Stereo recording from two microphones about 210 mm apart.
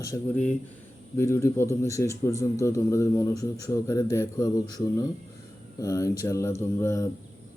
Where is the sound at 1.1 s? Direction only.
15° left (ahead or behind).